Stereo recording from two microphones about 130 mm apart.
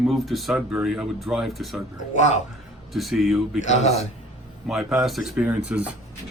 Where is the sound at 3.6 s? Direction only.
60° left (ahead or behind).